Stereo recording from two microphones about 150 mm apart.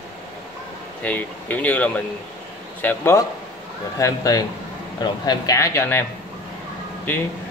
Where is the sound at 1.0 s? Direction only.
10° left (ahead or behind).